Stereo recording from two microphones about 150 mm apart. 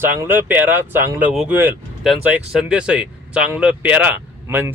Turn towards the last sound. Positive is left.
turn(degrees=-15)  # may be behind; listen again after turning